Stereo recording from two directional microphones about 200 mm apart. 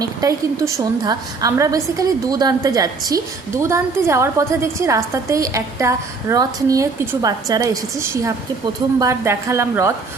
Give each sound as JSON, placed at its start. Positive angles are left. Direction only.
{"t": 0.0, "sound": "a woman's voice", "side_deg": -15}